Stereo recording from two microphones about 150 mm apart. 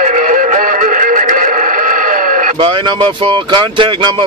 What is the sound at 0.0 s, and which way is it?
Music, 55° right (ahead or behind).